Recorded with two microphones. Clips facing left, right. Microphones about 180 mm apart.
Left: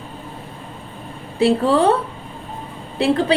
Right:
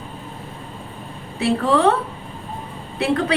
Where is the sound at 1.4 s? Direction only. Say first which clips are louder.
Left 3 dB; 30° left (ahead or behind).